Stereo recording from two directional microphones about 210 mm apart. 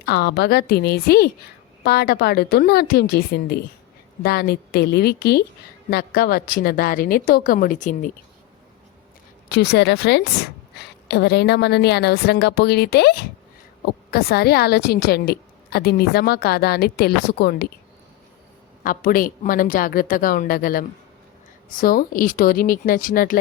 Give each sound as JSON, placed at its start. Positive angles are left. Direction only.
{"t": 0.0, "sound": "a woman's voice", "side_deg": 50}
{"t": 9.5, "sound": "a woman's voice", "side_deg": 55}
{"t": 18.8, "sound": "a woman's voice", "side_deg": 40}